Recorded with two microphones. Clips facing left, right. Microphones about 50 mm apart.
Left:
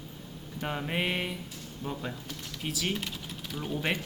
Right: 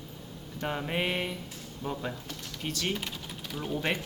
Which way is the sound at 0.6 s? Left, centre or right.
Centre.